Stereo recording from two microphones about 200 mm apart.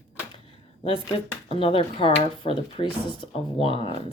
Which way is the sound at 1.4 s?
30° left (ahead or behind).